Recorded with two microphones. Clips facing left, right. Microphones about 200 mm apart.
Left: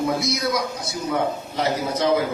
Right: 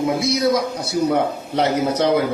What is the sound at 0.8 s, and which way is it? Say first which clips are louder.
A man's voice: right 5 dB; 65° right (ahead or behind).